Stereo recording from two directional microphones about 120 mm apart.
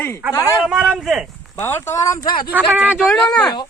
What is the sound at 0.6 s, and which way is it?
Speech, 5° right (ahead or behind).